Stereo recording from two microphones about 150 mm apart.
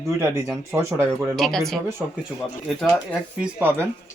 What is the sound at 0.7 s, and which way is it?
Speech, 20° right (ahead or behind).